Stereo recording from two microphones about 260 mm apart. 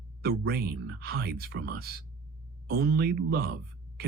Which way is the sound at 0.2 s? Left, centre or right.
Right.